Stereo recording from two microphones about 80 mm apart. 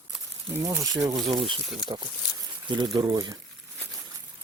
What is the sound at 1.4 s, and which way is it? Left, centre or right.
Speech, right.